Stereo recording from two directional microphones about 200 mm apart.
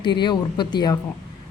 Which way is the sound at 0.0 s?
20° left (ahead or behind).